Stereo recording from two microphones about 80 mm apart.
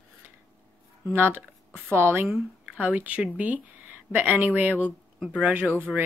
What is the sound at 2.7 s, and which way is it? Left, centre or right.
Speech, centre.